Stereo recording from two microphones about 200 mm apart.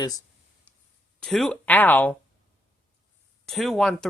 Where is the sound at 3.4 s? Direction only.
Centre (ahead or behind).